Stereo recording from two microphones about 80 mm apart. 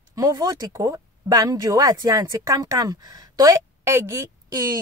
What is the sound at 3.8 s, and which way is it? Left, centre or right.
Speech, right.